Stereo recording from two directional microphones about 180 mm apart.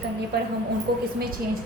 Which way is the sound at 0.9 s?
65° right (ahead or behind).